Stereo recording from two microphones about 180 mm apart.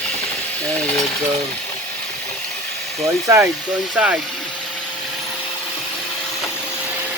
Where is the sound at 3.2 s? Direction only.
15° right (ahead or behind).